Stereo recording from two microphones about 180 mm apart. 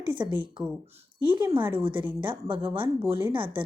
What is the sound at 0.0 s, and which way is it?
Speech, 25° right (ahead or behind).